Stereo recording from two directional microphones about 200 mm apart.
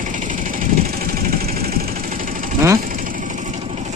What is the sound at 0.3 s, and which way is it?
Vehicle, 40° right (ahead or behind).